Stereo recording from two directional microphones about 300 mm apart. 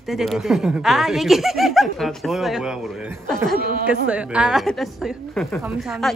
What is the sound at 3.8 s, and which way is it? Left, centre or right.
Speech, centre.